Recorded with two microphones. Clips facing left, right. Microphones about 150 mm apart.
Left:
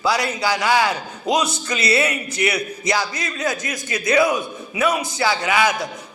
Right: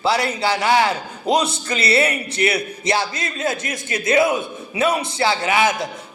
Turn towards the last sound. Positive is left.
turn(degrees=-25)  # may be behind; listen again after turning